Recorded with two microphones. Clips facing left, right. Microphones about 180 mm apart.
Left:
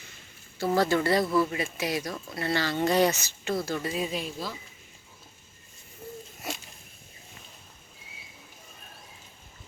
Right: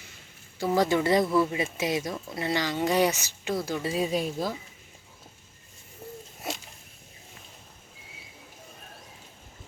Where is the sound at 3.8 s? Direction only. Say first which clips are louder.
Right 4 dB; 30° right (ahead or behind); by 4.5 s 45° right (ahead or behind).